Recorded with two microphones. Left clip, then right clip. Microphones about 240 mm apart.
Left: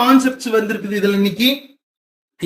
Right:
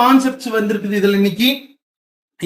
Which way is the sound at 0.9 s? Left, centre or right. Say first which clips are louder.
Right 2 dB; centre.